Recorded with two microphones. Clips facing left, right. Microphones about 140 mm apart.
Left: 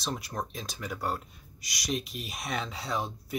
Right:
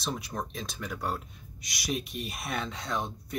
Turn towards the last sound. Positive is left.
turn(degrees=5)  # may be behind; listen again after turning